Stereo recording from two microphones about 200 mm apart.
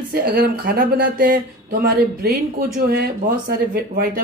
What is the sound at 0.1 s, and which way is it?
Speech, 50° right (ahead or behind).